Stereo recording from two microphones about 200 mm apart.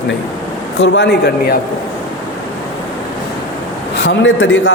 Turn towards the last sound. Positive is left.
turn(degrees=65)  # may be behind; listen again after turning